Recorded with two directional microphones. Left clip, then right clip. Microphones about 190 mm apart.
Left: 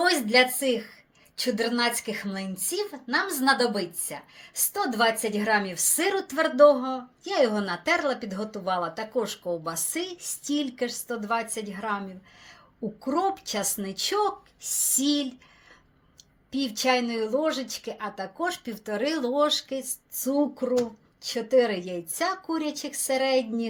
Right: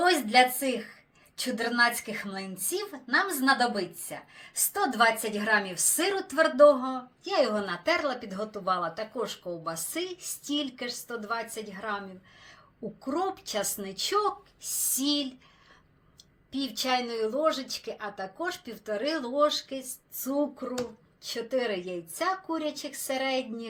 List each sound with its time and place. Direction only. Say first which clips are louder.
0.0 s a woman's voice: left 1 dB; 40° left (ahead or behind)
13.1 s a woman's voice: left 5 dB; 45° left (ahead or behind)
16.5 s a woman's voice: left 4 dB; 45° left (ahead or behind)